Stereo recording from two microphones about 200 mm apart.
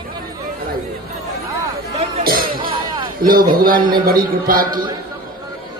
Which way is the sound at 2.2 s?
45° right (ahead or behind).